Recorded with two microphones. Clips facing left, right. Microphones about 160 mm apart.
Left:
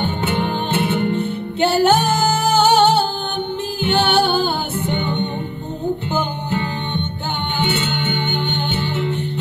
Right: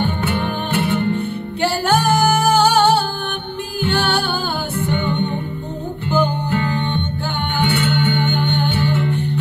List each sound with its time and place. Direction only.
0.0 s music: 20° left (ahead or behind)